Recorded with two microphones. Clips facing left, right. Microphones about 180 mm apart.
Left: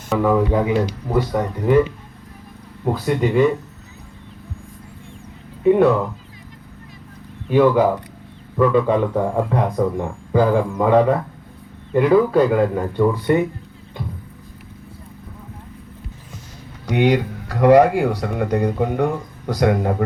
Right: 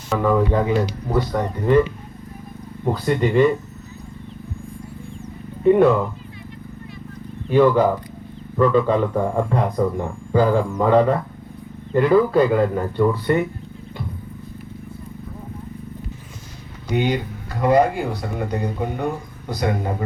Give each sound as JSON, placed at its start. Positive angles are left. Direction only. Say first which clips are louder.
{"t": 0.1, "sound": "speech", "louder": "left 1 dB", "side_deg": 5}
{"t": 2.8, "sound": "speech", "louder": "even", "side_deg": 5}
{"t": 5.6, "sound": "speech", "louder": "even", "side_deg": 5}
{"t": 7.5, "sound": "speech", "louder": "left 1 dB", "side_deg": 5}
{"t": 16.9, "sound": "speech", "louder": "left 4 dB", "side_deg": 75}